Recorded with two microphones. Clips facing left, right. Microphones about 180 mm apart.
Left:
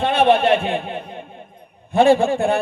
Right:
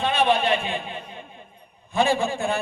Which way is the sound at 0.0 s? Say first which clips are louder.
Left 6 dB; 60° left (ahead or behind).